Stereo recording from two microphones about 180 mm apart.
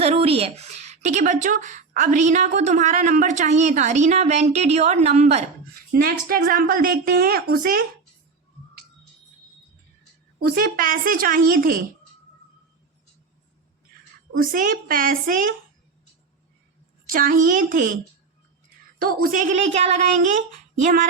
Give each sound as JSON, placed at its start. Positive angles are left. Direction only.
{"t": 0.0, "sound": "a woman's voice", "side_deg": -30}
{"t": 5.9, "sound": "a woman's voice", "side_deg": -55}
{"t": 10.4, "sound": "a woman's voice", "side_deg": -55}
{"t": 14.5, "sound": "a woman's voice", "side_deg": -50}
{"t": 17.1, "sound": "a woman's voice", "side_deg": -50}